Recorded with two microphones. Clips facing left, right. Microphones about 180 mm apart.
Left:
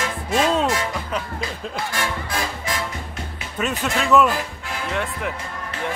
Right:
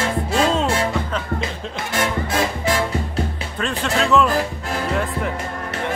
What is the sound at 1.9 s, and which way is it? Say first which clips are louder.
Music: right 9 dB; 25° right (ahead or behind).